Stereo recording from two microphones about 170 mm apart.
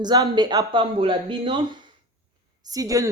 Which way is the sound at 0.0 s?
25° right (ahead or behind).